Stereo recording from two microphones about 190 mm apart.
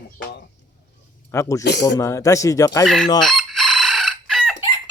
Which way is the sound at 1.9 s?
15° left (ahead or behind).